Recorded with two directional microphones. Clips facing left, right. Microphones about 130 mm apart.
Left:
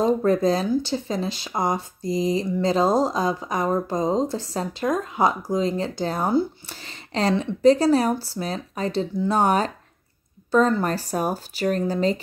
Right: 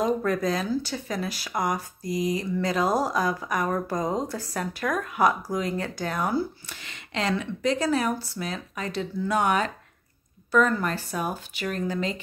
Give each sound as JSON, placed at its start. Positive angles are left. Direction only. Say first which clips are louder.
{"t": 0.0, "sound": "speech", "louder": "left 5 dB", "side_deg": 30}